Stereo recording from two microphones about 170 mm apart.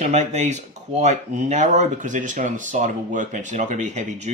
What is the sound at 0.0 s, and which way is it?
Speech, 45° right (ahead or behind).